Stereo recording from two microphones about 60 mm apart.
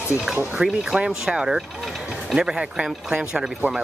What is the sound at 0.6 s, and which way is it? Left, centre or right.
Speech, centre.